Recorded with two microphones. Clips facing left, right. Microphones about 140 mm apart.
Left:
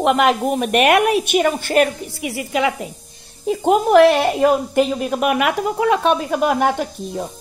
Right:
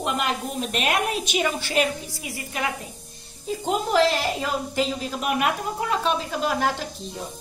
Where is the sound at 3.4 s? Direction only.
60° left (ahead or behind).